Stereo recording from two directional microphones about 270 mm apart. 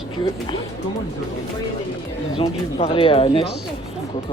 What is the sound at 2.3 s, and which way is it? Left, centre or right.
Speech, left.